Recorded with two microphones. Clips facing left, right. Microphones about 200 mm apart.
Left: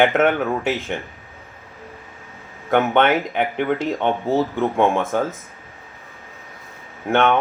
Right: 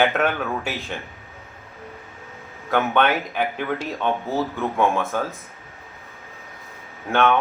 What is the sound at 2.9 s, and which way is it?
Speech, 20° left (ahead or behind).